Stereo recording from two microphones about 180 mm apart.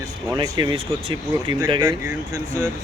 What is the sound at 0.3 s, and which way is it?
Speech, 20° right (ahead or behind).